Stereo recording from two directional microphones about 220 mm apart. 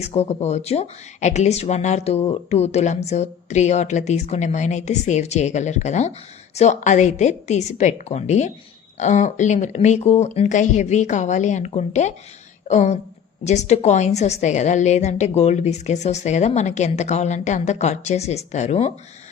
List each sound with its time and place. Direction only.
0.0 s a woman's voice: 30° left (ahead or behind)